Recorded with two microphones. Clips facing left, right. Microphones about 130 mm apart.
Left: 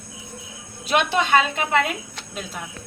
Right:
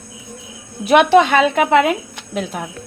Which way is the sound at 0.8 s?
65° right (ahead or behind).